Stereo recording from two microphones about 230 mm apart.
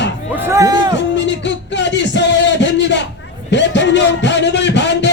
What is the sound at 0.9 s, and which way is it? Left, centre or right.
Music, left.